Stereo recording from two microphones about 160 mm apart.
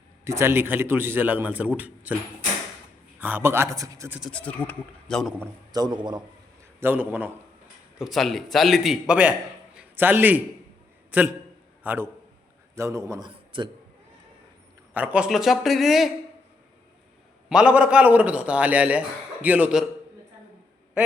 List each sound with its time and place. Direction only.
0.3 s a man's voice: 15° right (ahead or behind)
3.2 s a man's voice: 10° right (ahead or behind)
4.2 s speech: 5° left (ahead or behind)
5.7 s a man's voice: 25° right (ahead or behind)
6.7 s a man's voice: 10° right (ahead or behind); by 13.7 s 30° right (ahead or behind)
14.9 s speech: 10° right (ahead or behind)
17.5 s a man's voice: 5° right (ahead or behind)